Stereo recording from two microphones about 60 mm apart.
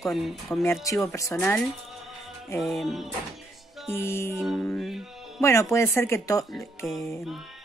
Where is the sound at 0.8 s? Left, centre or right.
Left.